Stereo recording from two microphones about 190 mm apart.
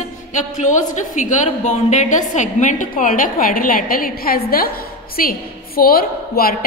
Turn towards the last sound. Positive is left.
turn(degrees=50)  # may be behind; listen again after turning